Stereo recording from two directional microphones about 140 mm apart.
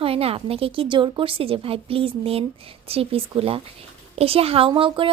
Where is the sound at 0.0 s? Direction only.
45° right (ahead or behind).